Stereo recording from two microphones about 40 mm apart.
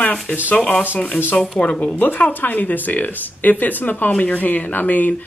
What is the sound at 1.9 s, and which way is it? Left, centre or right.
Speech, left.